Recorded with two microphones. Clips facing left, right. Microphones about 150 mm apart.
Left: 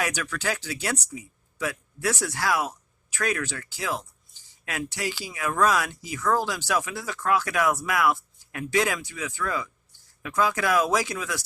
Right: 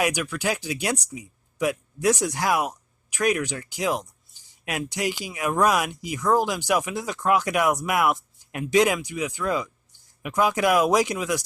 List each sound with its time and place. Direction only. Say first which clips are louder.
0.0 s speech: right 4 dB; 15° right (ahead or behind)